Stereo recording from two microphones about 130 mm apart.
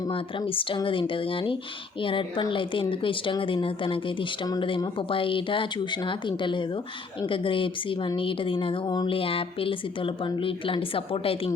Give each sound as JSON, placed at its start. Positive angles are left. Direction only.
{"t": 0.1, "sound": "speech", "side_deg": 40}